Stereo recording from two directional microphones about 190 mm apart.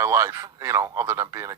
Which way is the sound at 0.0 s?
15° right (ahead or behind).